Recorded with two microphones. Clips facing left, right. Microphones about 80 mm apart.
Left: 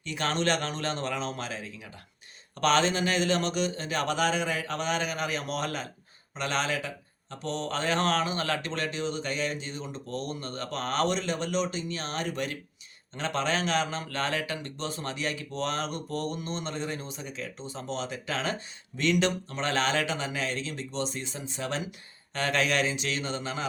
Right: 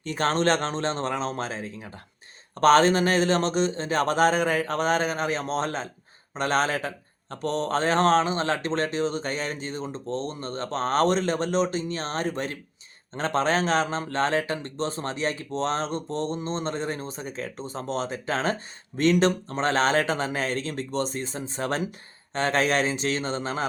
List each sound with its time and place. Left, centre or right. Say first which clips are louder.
0.0 s speech: right 5 dB; right